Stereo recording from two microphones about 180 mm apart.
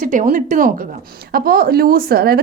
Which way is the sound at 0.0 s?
50° right (ahead or behind).